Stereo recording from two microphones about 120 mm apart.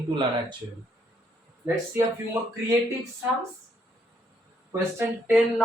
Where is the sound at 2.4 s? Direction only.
20° right (ahead or behind).